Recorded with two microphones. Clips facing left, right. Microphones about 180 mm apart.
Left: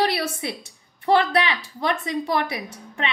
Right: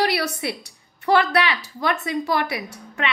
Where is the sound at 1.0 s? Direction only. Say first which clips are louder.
Even; 20° left (ahead or behind).